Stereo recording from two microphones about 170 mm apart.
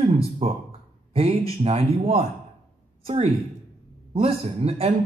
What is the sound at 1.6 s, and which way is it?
A woman's voice, 35° right (ahead or behind).